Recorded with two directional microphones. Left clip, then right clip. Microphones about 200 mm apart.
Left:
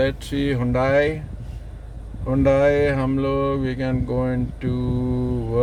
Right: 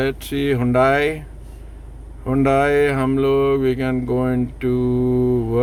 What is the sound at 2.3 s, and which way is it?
Speech, 50° right (ahead or behind).